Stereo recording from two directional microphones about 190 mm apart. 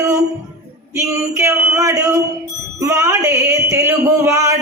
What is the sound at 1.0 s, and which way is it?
A man's voice, 15° right (ahead or behind).